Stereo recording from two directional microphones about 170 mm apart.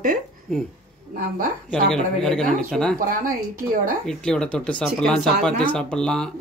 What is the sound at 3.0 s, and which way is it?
Speech, 55° right (ahead or behind).